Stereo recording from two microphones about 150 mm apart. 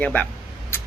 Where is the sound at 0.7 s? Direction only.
15° left (ahead or behind).